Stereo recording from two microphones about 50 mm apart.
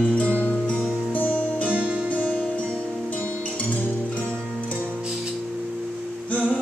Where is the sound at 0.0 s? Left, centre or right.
Left.